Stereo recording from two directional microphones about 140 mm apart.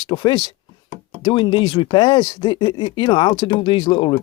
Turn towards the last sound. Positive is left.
turn(degrees=35)  # may be behind; listen again after turning